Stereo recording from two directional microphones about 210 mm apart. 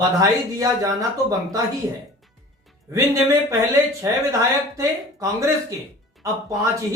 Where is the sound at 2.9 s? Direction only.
15° right (ahead or behind).